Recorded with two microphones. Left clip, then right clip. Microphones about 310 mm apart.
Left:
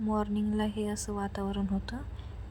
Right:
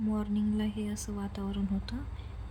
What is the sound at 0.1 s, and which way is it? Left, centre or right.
A woman's voice, centre.